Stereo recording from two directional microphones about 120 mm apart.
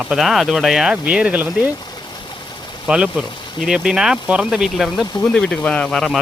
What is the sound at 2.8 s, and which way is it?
Speech, 10° right (ahead or behind).